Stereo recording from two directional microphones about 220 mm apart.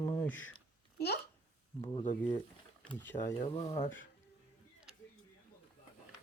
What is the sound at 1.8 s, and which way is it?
Speech, 25° left (ahead or behind).